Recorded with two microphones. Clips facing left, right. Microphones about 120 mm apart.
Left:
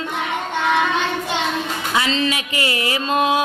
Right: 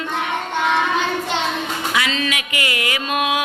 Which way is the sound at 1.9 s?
30° left (ahead or behind).